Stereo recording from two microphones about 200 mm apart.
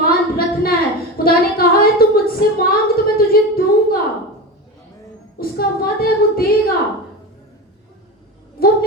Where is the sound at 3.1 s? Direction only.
50° left (ahead or behind).